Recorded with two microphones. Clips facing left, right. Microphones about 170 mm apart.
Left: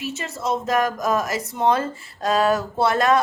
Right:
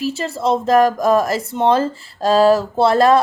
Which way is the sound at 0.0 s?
30° right (ahead or behind).